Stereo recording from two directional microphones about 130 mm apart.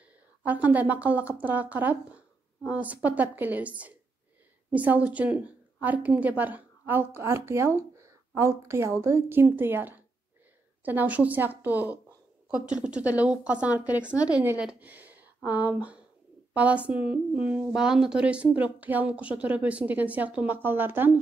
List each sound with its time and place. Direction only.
0.4 s a woman's voice: 10° right (ahead or behind)